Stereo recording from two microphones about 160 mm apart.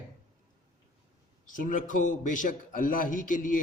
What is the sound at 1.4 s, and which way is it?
A man's voice, 55° left (ahead or behind).